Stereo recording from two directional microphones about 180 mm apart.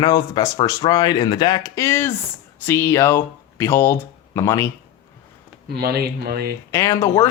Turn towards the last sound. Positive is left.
turn(degrees=15)  # may be behind; listen again after turning